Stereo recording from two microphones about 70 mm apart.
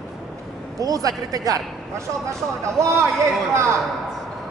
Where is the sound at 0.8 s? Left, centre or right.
Right.